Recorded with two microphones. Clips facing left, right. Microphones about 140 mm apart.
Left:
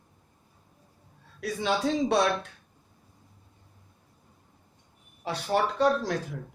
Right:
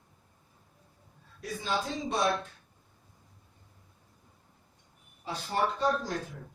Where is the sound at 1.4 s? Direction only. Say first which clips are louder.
Left 6 dB; 75° left (ahead or behind).